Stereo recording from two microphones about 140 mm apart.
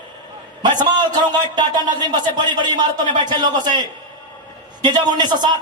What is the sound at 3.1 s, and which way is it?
Speech, 30° right (ahead or behind).